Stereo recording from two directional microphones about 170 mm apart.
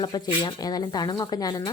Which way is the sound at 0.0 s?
25° left (ahead or behind).